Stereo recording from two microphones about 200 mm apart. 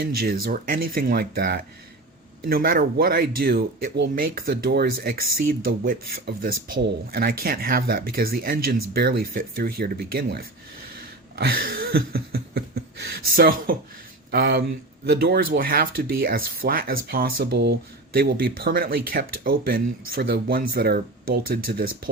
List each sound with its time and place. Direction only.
0.0 s speech: 50° right (ahead or behind)
11.3 s a sound: 50° right (ahead or behind)
14.3 s speech: 55° right (ahead or behind)